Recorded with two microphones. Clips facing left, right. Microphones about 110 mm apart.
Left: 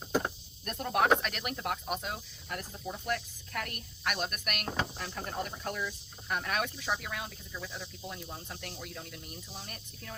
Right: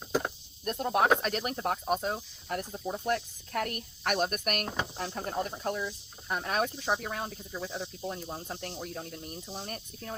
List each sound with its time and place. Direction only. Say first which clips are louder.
0.6 s speech: right 2 dB; 25° right (ahead or behind)
1.2 s speech: right 5 dB; 35° right (ahead or behind)